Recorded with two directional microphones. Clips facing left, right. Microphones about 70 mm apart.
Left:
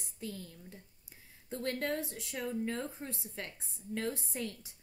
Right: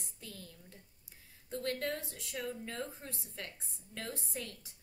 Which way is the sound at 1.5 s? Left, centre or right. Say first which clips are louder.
Left 1 dB; left.